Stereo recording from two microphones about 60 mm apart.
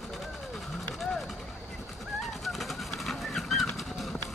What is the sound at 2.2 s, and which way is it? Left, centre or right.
Bird, centre.